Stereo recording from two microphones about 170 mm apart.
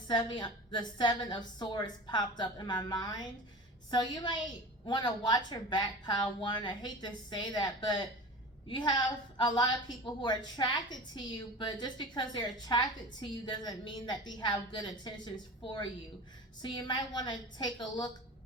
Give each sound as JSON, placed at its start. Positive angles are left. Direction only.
{"t": 0.1, "sound": "a woman's voice", "side_deg": 25}
{"t": 10.2, "sound": "a woman's voice", "side_deg": 25}